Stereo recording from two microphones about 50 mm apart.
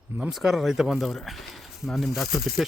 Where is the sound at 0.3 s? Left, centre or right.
Centre.